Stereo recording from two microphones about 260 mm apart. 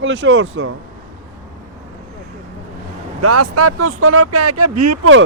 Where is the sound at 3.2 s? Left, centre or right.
Right.